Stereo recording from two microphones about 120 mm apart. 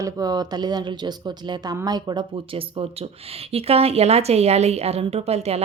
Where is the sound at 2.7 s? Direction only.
55° right (ahead or behind).